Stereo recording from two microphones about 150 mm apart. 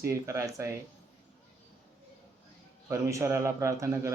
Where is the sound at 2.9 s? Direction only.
20° right (ahead or behind).